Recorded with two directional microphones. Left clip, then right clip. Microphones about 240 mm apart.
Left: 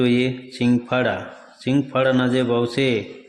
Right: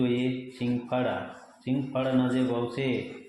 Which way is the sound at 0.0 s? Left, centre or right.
Left.